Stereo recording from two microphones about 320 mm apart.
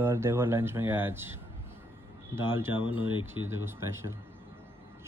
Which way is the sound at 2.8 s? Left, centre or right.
Centre.